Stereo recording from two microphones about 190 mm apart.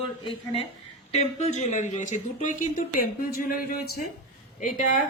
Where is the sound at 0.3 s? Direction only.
30° left (ahead or behind); by 5.0 s 45° left (ahead or behind).